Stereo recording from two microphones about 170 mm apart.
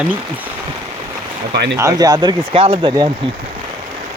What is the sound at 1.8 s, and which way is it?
Speech, 20° right (ahead or behind).